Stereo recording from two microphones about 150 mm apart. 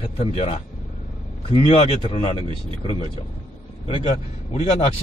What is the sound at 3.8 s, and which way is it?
A man's voice, 40° left (ahead or behind).